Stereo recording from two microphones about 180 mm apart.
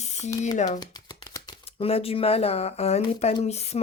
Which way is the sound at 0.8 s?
20° left (ahead or behind).